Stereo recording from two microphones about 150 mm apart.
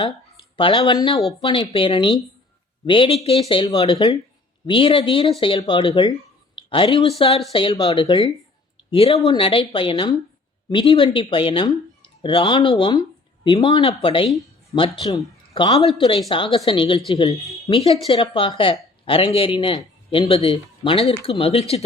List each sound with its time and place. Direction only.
0.5 s speech: 35° left (ahead or behind)
15.8 s speech: 40° left (ahead or behind)